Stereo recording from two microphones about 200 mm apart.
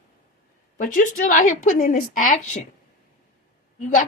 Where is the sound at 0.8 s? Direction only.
45° left (ahead or behind).